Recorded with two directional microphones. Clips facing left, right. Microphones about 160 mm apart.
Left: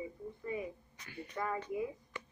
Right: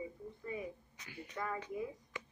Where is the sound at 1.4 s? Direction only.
40° left (ahead or behind).